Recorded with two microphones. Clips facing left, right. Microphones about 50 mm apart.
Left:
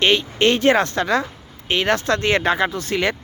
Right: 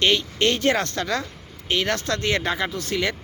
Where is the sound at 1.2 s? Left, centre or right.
Left.